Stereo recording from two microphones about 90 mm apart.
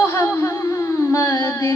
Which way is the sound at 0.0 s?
30° left (ahead or behind).